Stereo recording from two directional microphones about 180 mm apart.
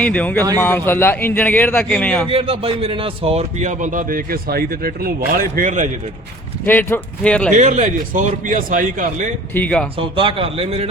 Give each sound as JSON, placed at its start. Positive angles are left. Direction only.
{"t": 0.0, "sound": "a man's voice", "side_deg": 5}
{"t": 2.3, "sound": "a man's voice", "side_deg": -30}
{"t": 6.7, "sound": "a man's voice", "side_deg": 10}
{"t": 7.5, "sound": "a man's voice", "side_deg": -40}
{"t": 9.6, "sound": "a man's voice", "side_deg": 5}
{"t": 10.0, "sound": "a man's voice", "side_deg": -30}